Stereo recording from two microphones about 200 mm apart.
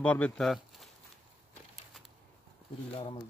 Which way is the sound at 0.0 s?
5° left (ahead or behind).